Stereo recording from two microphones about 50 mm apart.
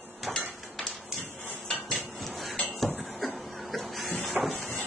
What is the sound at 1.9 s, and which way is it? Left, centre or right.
Cutlery, centre.